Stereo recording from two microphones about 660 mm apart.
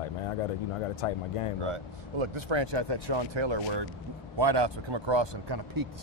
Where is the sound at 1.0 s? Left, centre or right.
Left.